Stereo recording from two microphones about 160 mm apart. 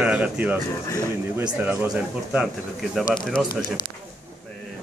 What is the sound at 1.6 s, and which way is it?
Speech, 10° right (ahead or behind).